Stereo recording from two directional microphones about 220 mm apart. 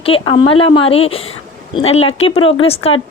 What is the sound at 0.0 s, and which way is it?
A woman's voice, 25° left (ahead or behind).